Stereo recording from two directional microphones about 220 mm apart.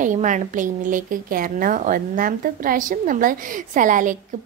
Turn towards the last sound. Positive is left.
turn(degrees=-35)  # may be behind; listen again after turning